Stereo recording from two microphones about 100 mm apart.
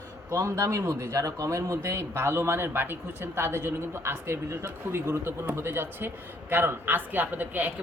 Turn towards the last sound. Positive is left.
turn(degrees=-15)  # may be behind; listen again after turning